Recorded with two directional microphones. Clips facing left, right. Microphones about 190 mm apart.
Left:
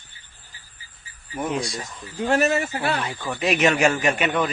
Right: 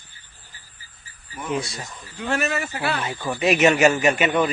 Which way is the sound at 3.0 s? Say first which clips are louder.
Right 3 dB; centre (ahead or behind).